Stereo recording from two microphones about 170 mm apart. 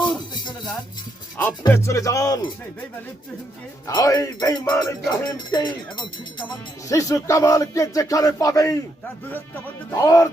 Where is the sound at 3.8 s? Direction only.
20° left (ahead or behind).